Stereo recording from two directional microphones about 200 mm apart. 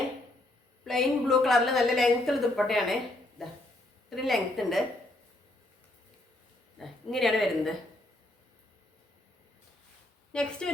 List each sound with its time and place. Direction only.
0.9 s a woman's voice: centre (ahead or behind)
6.7 s a woman's voice: centre (ahead or behind)
10.3 s a woman's voice: 5° left (ahead or behind)